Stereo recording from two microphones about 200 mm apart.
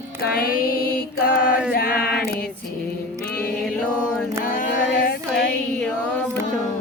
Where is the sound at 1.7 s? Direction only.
45° left (ahead or behind).